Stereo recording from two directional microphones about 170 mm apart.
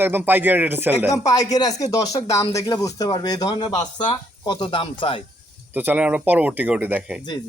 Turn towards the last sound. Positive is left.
turn(degrees=-10)  # may be behind; listen again after turning